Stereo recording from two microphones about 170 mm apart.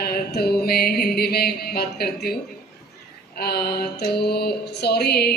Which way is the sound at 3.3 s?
65° left (ahead or behind).